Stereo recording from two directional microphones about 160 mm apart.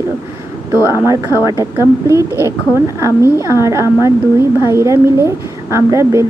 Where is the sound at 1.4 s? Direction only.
20° right (ahead or behind).